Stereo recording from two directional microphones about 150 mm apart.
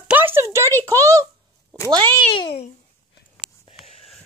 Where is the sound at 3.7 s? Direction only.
Centre (ahead or behind).